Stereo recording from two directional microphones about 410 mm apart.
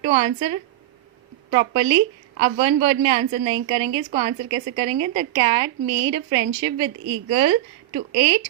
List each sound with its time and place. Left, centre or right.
0.0 s a woman's voice: centre